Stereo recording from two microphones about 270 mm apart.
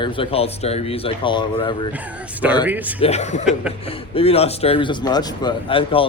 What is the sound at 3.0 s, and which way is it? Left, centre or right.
Speech, left.